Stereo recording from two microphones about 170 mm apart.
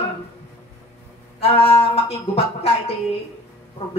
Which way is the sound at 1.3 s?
35° left (ahead or behind).